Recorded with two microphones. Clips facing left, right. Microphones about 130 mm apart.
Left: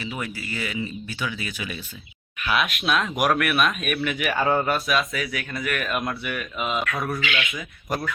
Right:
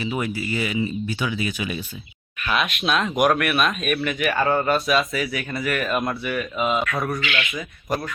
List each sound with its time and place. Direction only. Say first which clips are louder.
0.0 s speech: right 6 dB; 20° right (ahead or behind)
2.4 s speech: right 1 dB; 5° left (ahead or behind)